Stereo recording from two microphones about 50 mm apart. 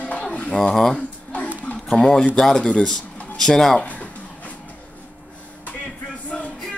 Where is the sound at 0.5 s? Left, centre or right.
Centre.